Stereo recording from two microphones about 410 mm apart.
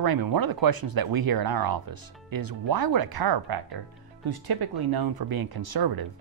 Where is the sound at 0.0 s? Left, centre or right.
Right.